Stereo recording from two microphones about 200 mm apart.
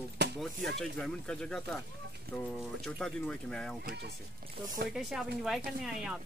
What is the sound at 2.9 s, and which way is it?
Speech, 5° left (ahead or behind).